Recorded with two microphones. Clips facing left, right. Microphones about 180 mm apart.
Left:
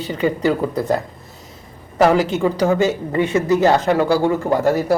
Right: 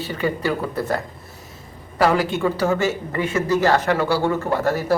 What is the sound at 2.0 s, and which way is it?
Speech, 20° left (ahead or behind).